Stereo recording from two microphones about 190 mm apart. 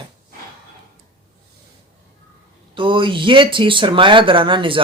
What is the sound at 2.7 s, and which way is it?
Speech, 25° right (ahead or behind).